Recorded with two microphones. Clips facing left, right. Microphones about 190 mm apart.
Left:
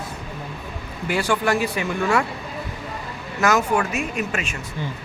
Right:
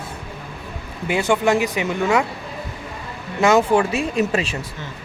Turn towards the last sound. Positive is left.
turn(degrees=-35)  # may be behind; listen again after turning